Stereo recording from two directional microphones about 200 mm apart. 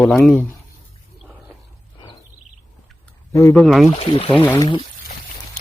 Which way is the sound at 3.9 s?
25° left (ahead or behind).